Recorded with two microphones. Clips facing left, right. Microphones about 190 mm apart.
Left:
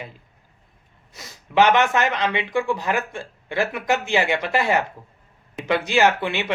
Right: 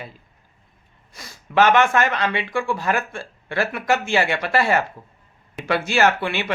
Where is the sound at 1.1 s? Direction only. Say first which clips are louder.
Even; 20° left (ahead or behind).